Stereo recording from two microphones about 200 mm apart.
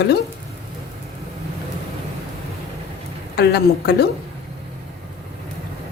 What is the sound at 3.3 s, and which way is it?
Speech, 55° left (ahead or behind).